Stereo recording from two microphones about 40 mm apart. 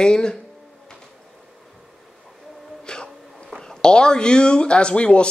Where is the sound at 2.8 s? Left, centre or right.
Left.